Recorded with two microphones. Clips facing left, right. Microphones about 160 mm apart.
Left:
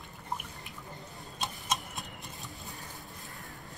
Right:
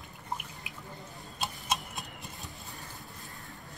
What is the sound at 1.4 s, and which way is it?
Tick-tock, 5° right (ahead or behind).